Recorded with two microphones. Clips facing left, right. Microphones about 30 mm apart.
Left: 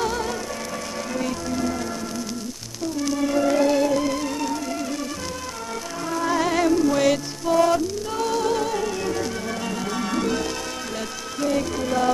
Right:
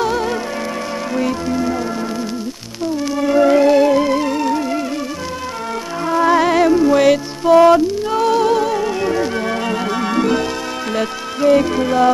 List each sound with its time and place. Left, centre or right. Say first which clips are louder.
0.0 s music: right 7 dB; right
3.1 s music: right 8 dB; right
6.0 s music: right 9 dB; right